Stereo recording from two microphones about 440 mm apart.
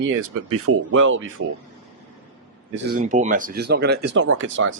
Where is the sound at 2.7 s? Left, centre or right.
Centre.